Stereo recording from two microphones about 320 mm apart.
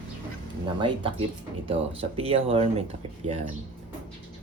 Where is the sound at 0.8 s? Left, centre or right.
Centre.